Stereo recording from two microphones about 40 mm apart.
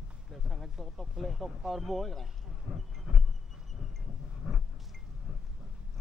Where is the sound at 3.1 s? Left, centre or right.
Centre.